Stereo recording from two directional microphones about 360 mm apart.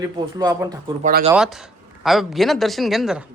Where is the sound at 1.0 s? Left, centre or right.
Right.